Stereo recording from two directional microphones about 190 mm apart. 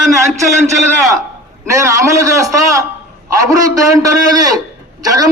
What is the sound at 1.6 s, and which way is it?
A man's voice, 15° right (ahead or behind).